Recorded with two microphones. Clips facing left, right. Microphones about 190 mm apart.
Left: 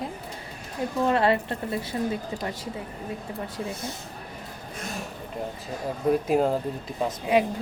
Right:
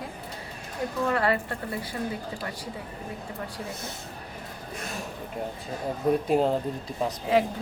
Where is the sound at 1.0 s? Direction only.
25° left (ahead or behind).